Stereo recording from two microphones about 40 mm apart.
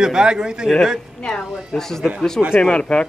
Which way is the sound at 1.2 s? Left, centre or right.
Centre.